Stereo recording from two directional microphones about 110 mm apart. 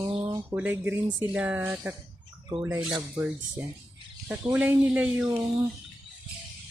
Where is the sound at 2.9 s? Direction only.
15° right (ahead or behind).